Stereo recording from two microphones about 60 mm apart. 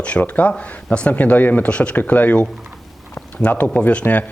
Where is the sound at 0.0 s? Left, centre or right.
Left.